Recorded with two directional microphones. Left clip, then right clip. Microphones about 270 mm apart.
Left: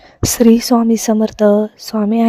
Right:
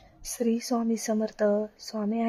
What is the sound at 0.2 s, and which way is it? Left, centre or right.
Speech, left.